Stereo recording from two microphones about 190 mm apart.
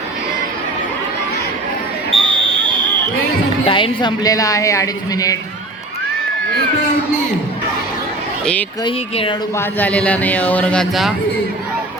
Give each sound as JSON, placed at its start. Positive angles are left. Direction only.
{"t": 2.1, "sound": "basketball bounce", "side_deg": -30}
{"t": 3.7, "sound": "speech", "side_deg": 25}
{"t": 8.8, "sound": "speech", "side_deg": 25}
{"t": 9.6, "sound": "speech", "side_deg": 10}